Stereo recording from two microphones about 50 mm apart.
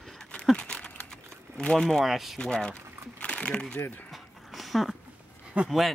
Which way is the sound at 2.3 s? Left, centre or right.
Centre.